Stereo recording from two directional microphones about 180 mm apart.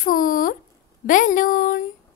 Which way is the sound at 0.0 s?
50° left (ahead or behind).